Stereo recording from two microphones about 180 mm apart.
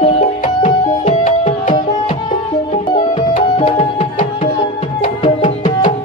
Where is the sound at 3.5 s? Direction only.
35° left (ahead or behind).